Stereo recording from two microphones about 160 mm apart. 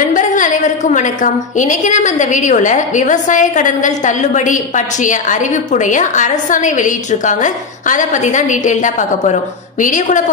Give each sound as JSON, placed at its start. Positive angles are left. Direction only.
{"t": 0.1, "sound": "a woman's voice", "side_deg": 50}